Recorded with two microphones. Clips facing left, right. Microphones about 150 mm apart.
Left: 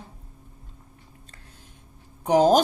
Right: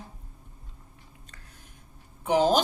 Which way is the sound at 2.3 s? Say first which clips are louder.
Left 5 dB; 45° left (ahead or behind).